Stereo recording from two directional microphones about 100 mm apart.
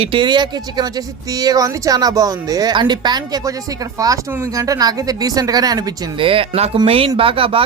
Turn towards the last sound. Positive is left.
turn(degrees=-65)  # may be behind; listen again after turning